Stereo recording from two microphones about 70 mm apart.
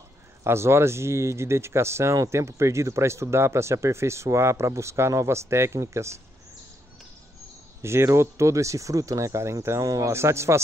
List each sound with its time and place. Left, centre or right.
0.4 s speech: right
7.8 s speech: right